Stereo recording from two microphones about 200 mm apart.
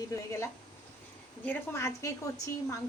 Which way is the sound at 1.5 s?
15° left (ahead or behind).